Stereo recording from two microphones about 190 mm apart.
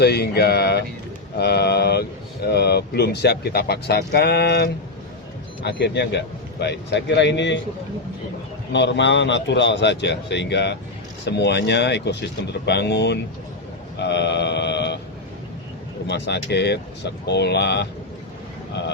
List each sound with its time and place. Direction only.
0.0 s a man's voice: 60° left (ahead or behind)
8.7 s a man's voice: 65° left (ahead or behind)
16.0 s speech: 65° left (ahead or behind)